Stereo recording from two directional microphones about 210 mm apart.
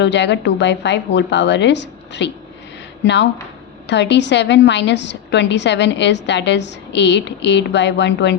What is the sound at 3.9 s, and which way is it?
A woman's voice, 55° left (ahead or behind).